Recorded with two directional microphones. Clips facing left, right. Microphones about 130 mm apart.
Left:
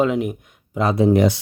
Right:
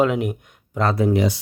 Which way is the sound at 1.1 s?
55° left (ahead or behind).